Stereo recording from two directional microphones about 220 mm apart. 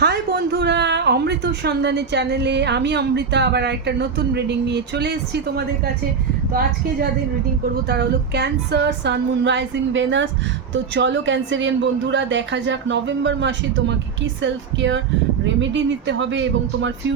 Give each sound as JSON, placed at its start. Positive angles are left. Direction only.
{"t": 0.0, "sound": "speech", "side_deg": -50}